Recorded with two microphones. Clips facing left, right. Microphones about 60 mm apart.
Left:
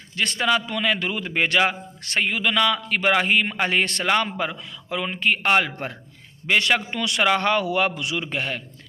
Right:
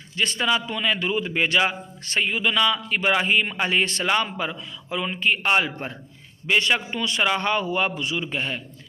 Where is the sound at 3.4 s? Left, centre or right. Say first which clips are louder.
Left 1 dB; left.